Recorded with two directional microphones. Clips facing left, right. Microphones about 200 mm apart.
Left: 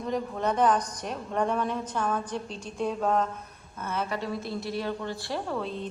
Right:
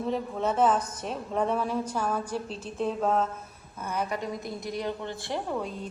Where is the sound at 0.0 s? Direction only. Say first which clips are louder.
Even; centre (ahead or behind).